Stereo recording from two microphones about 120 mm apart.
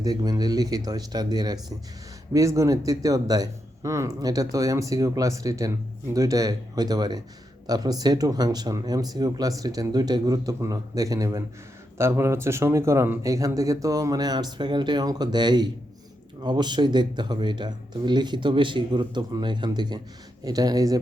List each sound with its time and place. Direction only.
0.0 s speech: 30° right (ahead or behind)